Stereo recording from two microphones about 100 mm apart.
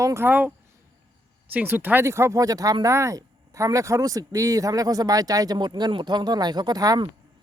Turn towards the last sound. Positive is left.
turn(degrees=-40)  # may be behind; listen again after turning